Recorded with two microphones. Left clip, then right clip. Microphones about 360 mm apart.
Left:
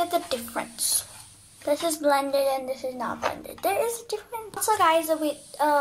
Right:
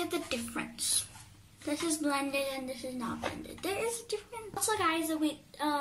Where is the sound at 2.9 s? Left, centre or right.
Left.